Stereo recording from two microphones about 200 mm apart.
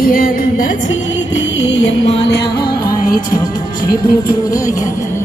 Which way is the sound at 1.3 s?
65° left (ahead or behind).